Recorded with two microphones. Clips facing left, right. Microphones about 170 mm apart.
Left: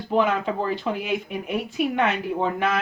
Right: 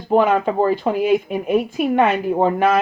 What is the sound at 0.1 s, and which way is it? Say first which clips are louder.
Speech: right 6 dB; 50° right (ahead or behind).